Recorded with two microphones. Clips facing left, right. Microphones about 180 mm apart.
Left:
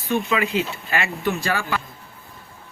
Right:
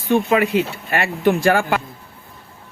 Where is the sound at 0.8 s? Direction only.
50° right (ahead or behind).